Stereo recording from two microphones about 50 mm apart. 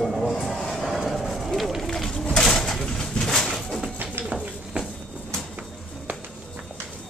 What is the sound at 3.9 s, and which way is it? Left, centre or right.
Bird, right.